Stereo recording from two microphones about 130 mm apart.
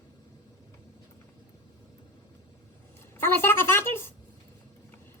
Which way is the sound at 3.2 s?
15° left (ahead or behind).